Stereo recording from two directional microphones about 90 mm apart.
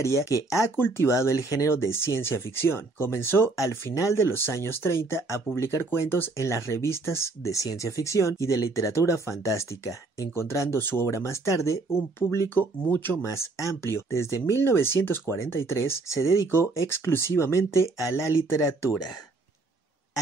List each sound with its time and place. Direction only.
0.0 s speech: 30° left (ahead or behind)